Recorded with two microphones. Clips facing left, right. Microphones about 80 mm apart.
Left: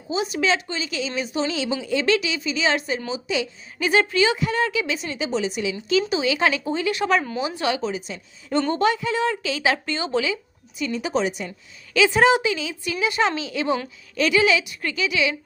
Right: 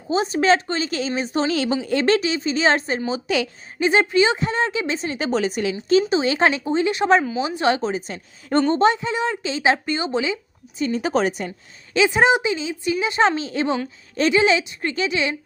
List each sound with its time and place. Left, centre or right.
0.1 s speech: right
3.1 s a woman's voice: right
3.8 s speech: right
5.9 s a woman's voice: right
7.7 s speech: right
8.7 s a woman's voice: right
10.8 s a woman's voice: right
11.9 s a woman's voice: right